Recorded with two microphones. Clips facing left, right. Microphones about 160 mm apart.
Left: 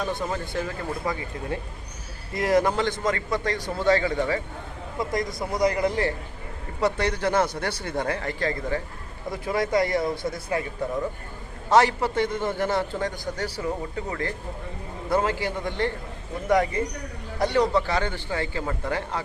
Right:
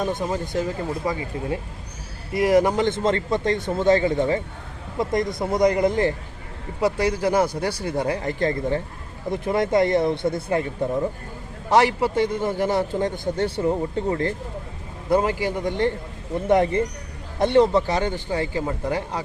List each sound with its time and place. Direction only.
0.0 s a man's voice: 15° right (ahead or behind)
2.3 s a man's voice: 15° right (ahead or behind)
5.4 s a man's voice: 25° right (ahead or behind)
6.8 s a man's voice: 10° right (ahead or behind); by 10.6 s 25° right (ahead or behind)
11.7 s a man's voice: 15° right (ahead or behind)